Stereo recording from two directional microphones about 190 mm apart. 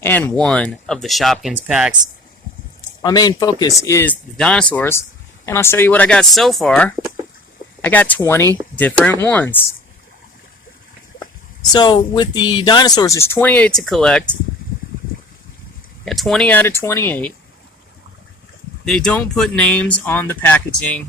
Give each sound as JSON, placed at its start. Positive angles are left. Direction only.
{"t": 0.0, "sound": "speech", "side_deg": 10}
{"t": 3.0, "sound": "speech", "side_deg": 20}
{"t": 11.7, "sound": "speech", "side_deg": 25}
{"t": 16.0, "sound": "speech", "side_deg": 0}
{"t": 18.9, "sound": "speech", "side_deg": 5}